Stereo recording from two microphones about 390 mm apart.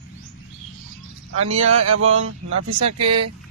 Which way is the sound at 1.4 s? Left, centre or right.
Right.